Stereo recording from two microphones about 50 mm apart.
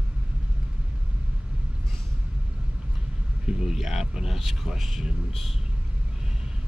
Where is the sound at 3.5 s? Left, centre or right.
Centre.